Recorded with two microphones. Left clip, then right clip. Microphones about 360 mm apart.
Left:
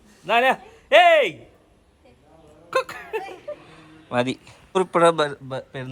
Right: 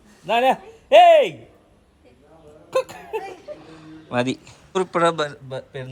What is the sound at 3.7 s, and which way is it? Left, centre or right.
Speech, centre.